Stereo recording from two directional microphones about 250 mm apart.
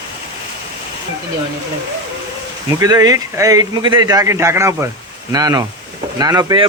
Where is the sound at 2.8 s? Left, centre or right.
Centre.